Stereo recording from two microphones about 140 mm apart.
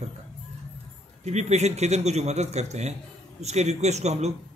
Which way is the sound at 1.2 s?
55° right (ahead or behind).